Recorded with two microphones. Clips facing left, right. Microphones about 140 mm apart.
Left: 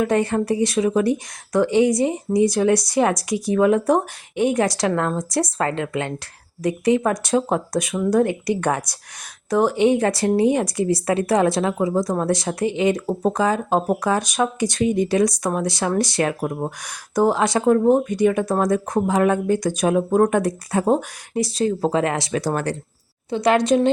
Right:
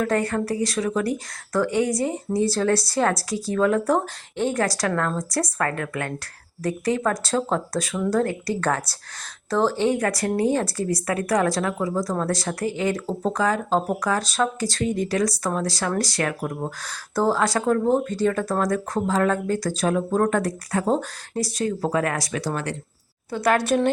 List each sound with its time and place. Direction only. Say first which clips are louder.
0.0 s speech: left 3 dB; 20° left (ahead or behind)
22.4 s speech: left 5 dB; 45° left (ahead or behind)
23.3 s speech: left 4 dB; 20° left (ahead or behind)